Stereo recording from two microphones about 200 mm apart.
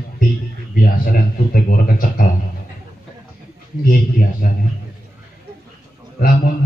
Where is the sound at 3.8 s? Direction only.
45° left (ahead or behind).